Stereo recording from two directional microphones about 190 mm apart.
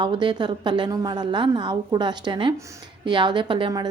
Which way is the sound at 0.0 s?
25° right (ahead or behind).